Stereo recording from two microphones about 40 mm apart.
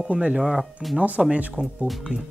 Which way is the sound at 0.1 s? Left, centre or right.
Right.